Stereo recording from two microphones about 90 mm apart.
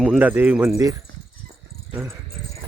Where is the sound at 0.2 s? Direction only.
20° right (ahead or behind).